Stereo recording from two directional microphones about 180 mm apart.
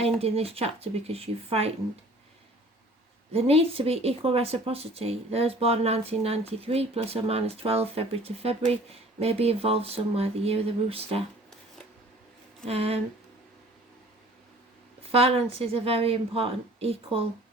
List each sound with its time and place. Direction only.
0.0 s speech: 35° right (ahead or behind)
3.3 s speech: 35° right (ahead or behind)
12.6 s speech: 35° right (ahead or behind)
15.1 s speech: 30° right (ahead or behind)